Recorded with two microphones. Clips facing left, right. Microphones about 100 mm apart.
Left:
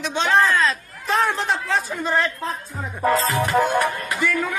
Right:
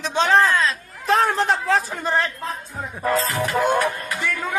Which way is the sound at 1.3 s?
35° right (ahead or behind).